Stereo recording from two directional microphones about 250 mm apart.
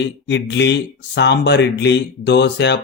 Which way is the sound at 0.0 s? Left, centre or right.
Left.